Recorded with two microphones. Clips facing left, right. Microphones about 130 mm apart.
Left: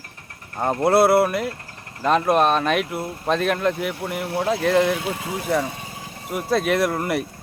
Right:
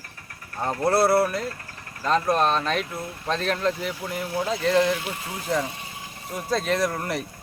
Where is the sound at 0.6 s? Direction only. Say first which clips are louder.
Left 5 dB; 25° left (ahead or behind).